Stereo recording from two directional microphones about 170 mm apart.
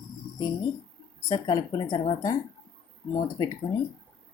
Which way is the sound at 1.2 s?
20° left (ahead or behind).